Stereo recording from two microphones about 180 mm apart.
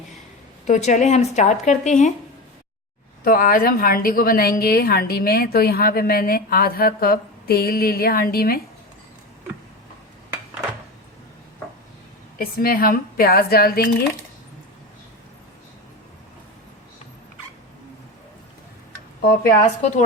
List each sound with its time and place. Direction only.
0.7 s a woman's voice: 40° left (ahead or behind)
3.2 s a woman's voice: 50° left (ahead or behind)
12.4 s a woman's voice: 55° left (ahead or behind)
19.2 s a woman's voice: 55° left (ahead or behind)